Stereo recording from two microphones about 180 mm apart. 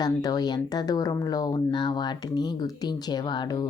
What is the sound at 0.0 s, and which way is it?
Speech, 20° left (ahead or behind).